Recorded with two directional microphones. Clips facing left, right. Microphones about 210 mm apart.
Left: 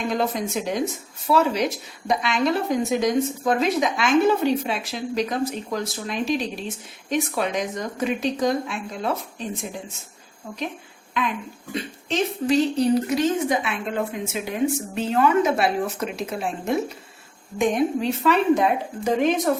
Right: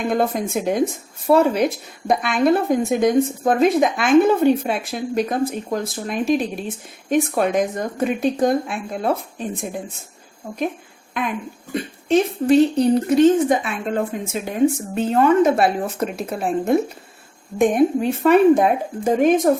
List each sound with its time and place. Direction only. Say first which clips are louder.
0.1 s a woman's voice: right 5 dB; 50° right (ahead or behind)
11.7 s a woman's voice: right 9 dB; 55° right (ahead or behind)